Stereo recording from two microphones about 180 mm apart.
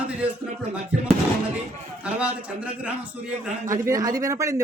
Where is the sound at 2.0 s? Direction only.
5° right (ahead or behind).